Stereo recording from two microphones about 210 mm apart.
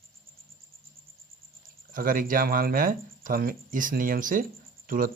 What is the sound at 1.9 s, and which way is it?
Speech, 40° right (ahead or behind).